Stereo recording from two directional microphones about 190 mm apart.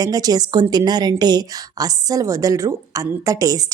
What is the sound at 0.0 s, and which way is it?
A woman's voice, 20° right (ahead or behind).